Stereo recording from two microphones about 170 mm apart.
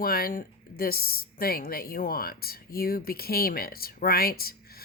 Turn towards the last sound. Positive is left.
turn(degrees=60)  # may be behind; listen again after turning